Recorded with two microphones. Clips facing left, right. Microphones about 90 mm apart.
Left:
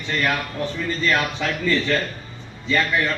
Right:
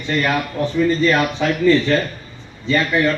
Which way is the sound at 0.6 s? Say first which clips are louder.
Right 11 dB; 15° right (ahead or behind).